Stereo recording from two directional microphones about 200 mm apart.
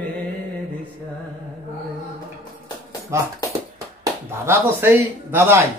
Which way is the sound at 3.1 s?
15° right (ahead or behind).